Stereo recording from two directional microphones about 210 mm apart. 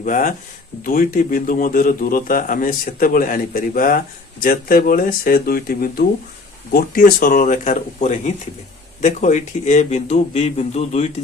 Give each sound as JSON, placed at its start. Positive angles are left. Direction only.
{"t": 0.0, "sound": "speech", "side_deg": 40}